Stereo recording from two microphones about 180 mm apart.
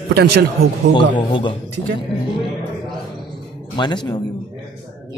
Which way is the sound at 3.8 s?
25° left (ahead or behind).